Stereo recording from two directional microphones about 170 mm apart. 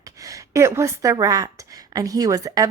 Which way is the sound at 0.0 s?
20° right (ahead or behind).